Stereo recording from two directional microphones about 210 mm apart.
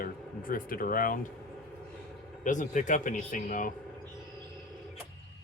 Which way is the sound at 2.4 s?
35° left (ahead or behind).